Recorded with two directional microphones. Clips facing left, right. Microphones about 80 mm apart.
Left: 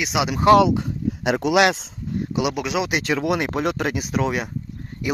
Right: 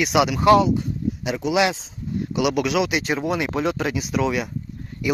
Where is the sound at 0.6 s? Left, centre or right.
Left.